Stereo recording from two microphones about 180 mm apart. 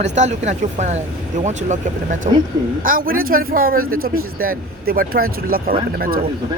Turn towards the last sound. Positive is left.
turn(degrees=-55)  # may be behind; listen again after turning